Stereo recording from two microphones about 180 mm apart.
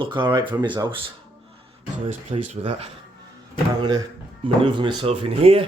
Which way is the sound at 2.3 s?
35° right (ahead or behind).